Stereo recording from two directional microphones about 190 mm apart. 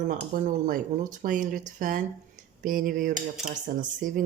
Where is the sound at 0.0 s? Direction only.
45° right (ahead or behind).